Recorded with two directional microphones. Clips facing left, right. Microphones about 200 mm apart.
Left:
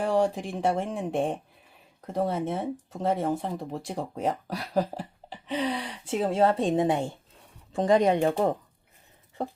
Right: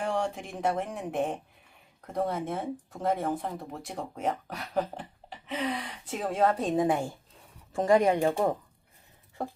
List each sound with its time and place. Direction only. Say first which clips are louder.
0.0 s speech: left 6 dB; 35° left (ahead or behind); by 8.3 s 20° left (ahead or behind)